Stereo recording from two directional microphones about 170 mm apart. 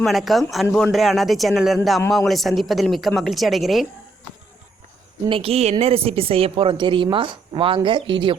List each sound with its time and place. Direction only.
0.0 s a woman's voice: centre (ahead or behind)
5.3 s a woman's voice: 35° right (ahead or behind)